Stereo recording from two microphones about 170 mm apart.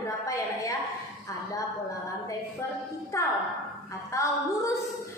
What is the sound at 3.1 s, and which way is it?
A woman's voice, 20° left (ahead or behind).